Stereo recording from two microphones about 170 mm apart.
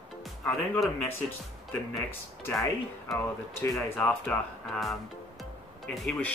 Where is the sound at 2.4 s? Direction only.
20° left (ahead or behind).